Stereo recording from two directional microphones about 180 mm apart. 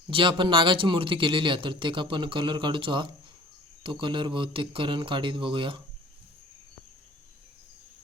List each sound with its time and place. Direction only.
0.1 s speech: 30° right (ahead or behind)